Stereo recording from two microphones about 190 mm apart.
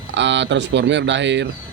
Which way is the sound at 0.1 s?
70° right (ahead or behind).